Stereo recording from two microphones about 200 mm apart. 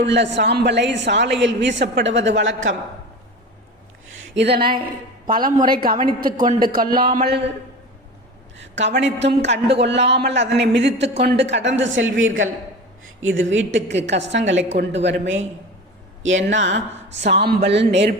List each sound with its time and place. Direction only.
0.0 s a woman's voice: 60° right (ahead or behind)
4.1 s a sound: 65° right (ahead or behind)
4.7 s a woman's voice: 25° right (ahead or behind)
5.6 s speech: 45° right (ahead or behind)
8.5 s a sound: 65° right (ahead or behind)
9.0 s a woman's voice: 60° right (ahead or behind)
16.5 s a woman's voice: 70° right (ahead or behind)